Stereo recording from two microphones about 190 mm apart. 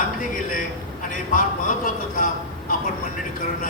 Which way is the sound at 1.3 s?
45° left (ahead or behind).